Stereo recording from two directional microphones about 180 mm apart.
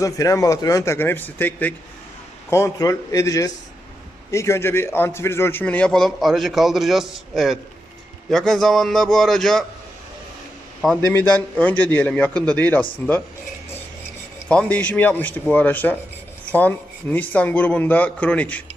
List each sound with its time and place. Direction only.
0.0 s a man's voice: 20° left (ahead or behind); by 9.6 s centre (ahead or behind)
11.0 s speech: 15° left (ahead or behind)
14.4 s speech: 5° left (ahead or behind)